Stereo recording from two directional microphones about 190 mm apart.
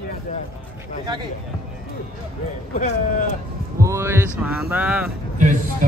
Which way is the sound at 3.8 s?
15° right (ahead or behind).